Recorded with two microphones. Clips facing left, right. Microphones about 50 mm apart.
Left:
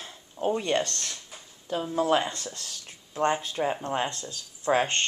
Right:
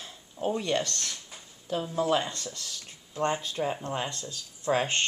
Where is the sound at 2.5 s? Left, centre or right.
Left.